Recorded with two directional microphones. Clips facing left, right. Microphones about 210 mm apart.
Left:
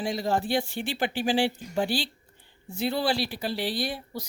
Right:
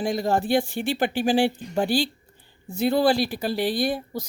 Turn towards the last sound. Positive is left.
turn(degrees=-45)  # may be behind; listen again after turning